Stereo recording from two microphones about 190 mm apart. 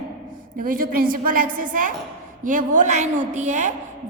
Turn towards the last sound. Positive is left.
turn(degrees=-40)  # may be behind; listen again after turning